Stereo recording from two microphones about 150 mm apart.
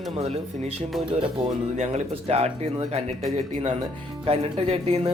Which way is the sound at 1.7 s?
50° right (ahead or behind).